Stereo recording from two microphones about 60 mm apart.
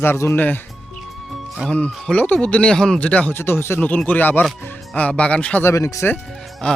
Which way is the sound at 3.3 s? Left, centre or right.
Left.